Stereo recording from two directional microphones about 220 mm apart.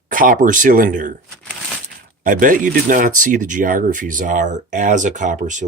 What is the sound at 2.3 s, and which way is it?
Speech, 40° right (ahead or behind).